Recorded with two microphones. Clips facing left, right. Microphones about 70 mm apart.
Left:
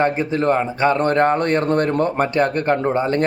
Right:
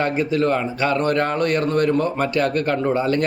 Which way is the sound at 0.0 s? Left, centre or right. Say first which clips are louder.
Left 1 dB; left.